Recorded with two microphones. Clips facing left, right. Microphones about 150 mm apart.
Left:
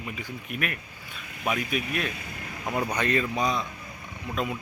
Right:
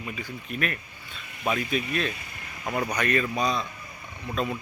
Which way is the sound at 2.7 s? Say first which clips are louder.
Even; 25° left (ahead or behind).